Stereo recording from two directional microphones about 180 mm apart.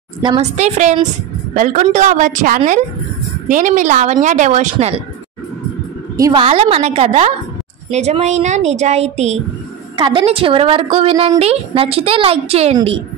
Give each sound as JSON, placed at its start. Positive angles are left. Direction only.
{"t": 0.4, "sound": "a woman's voice", "side_deg": -40}
{"t": 6.1, "sound": "a woman's voice", "side_deg": -20}
{"t": 6.4, "sound": "a woman's voice", "side_deg": -35}
{"t": 9.9, "sound": "a woman's voice", "side_deg": -25}